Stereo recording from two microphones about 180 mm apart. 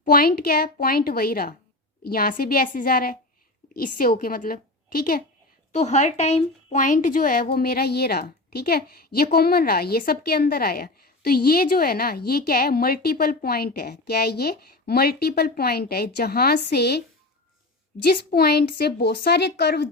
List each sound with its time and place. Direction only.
0.0 s a woman's voice: 55° left (ahead or behind)
5.7 s a woman's voice: 40° left (ahead or behind); by 17.0 s 65° left (ahead or behind)
18.0 s a woman's voice: 60° left (ahead or behind)